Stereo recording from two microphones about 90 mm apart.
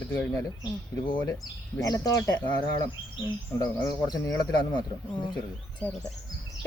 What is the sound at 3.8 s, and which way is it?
Speech, 40° left (ahead or behind).